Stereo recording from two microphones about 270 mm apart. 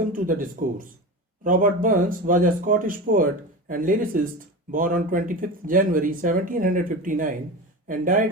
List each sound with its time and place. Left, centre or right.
0.0 s speech: right